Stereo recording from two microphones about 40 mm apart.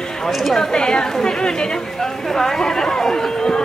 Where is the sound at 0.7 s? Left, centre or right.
Centre.